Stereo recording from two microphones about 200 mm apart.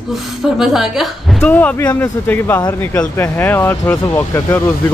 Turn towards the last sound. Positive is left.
turn(degrees=15)  # may be behind; listen again after turning